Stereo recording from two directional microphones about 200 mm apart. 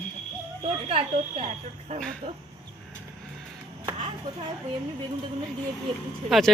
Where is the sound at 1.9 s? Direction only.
5° left (ahead or behind).